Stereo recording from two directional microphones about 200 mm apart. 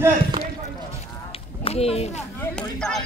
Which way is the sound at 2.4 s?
5° left (ahead or behind).